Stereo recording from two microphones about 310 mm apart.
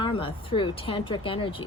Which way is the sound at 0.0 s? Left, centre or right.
Centre.